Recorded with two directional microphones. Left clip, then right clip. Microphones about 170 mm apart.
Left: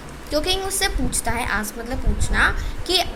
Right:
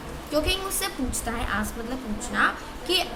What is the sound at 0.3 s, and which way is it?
Speech, 25° left (ahead or behind).